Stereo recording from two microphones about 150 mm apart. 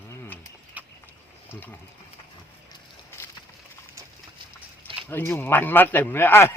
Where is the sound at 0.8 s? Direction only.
10° right (ahead or behind).